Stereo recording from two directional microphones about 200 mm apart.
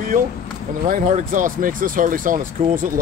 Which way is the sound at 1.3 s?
40° right (ahead or behind).